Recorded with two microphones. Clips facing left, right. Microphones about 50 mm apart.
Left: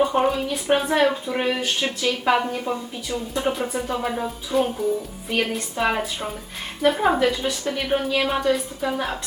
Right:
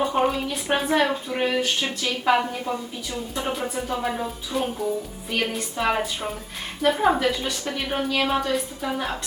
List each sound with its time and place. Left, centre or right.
0.0 s speech: centre